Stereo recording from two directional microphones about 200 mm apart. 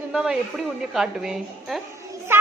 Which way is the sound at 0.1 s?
Centre (ahead or behind).